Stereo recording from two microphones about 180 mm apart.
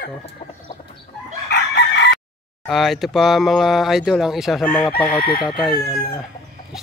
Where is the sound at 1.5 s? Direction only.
70° left (ahead or behind).